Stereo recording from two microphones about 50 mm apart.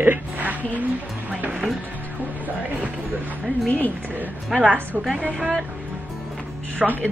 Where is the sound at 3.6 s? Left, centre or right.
Left.